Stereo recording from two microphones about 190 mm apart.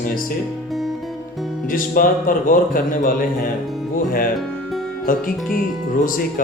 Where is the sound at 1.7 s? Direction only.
45° left (ahead or behind).